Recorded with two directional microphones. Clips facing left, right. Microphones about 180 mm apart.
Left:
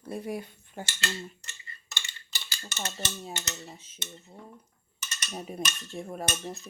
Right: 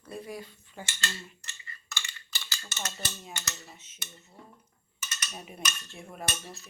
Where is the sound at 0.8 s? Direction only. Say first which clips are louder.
Left 3 dB; 35° left (ahead or behind).